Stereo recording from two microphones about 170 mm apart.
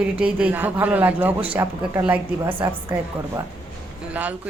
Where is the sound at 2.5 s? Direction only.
30° right (ahead or behind).